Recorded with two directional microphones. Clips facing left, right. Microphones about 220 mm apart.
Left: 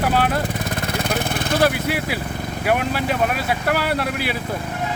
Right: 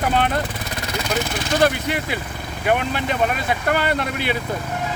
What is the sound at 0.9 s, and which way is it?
Vehicle, 55° left (ahead or behind).